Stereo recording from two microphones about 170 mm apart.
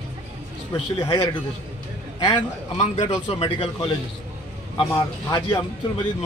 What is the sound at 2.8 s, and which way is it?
A man's voice, 40° left (ahead or behind).